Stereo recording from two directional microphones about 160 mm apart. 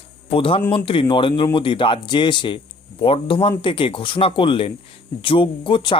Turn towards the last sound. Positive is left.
turn(degrees=30)  # may be behind; listen again after turning